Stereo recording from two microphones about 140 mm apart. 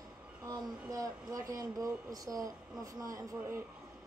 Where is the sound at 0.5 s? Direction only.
25° right (ahead or behind).